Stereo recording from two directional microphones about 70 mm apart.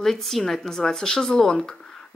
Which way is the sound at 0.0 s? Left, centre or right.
Centre.